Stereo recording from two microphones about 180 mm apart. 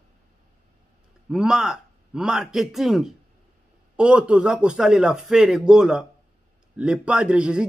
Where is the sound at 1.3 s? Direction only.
5° right (ahead or behind).